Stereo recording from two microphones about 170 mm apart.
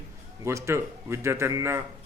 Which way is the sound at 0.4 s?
15° right (ahead or behind).